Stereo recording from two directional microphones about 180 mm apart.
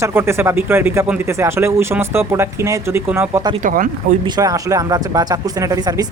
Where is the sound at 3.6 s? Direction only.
50° right (ahead or behind).